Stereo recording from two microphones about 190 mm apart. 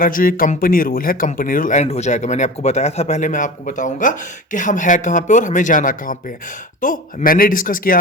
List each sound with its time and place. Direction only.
0.0 s speech: 50° left (ahead or behind)